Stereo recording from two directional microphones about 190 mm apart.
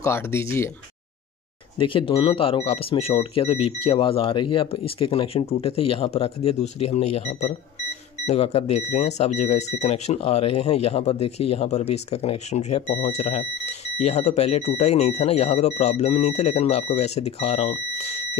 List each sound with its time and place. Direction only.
0.0 s speech: 15° left (ahead or behind)
1.8 s speech: 25° left (ahead or behind)